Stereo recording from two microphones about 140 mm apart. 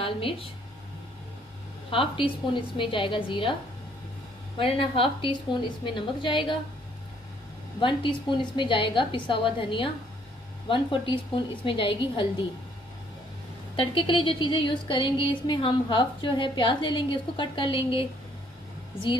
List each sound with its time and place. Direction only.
0.0 s speech: 40° left (ahead or behind)
1.9 s a woman's voice: 40° left (ahead or behind)
4.6 s a woman's voice: 40° left (ahead or behind)
7.8 s a woman's voice: 35° left (ahead or behind)
13.7 s a woman's voice: 40° left (ahead or behind)